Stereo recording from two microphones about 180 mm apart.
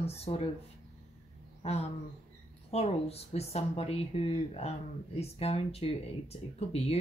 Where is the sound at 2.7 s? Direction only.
35° left (ahead or behind).